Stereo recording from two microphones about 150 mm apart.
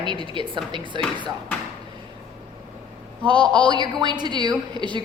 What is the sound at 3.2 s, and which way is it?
A woman's voice, 30° right (ahead or behind).